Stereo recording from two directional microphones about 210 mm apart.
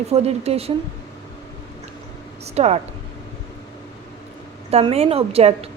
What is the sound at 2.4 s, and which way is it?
Speech, 30° right (ahead or behind).